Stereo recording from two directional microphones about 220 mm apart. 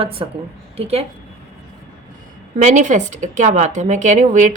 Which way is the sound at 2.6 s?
35° right (ahead or behind).